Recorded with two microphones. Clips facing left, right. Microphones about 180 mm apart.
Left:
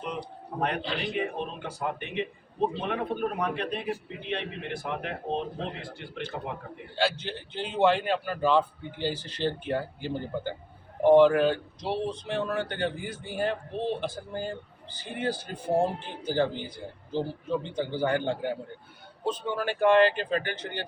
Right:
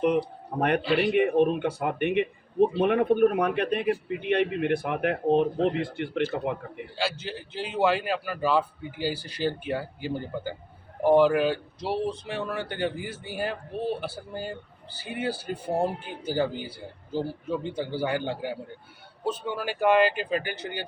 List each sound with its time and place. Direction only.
0.8 s a man's voice: 5° right (ahead or behind)
1.1 s a man's voice: 60° right (ahead or behind)
6.9 s a man's voice: centre (ahead or behind)